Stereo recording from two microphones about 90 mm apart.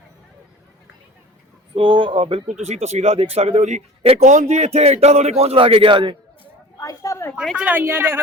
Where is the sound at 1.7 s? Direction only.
70° right (ahead or behind).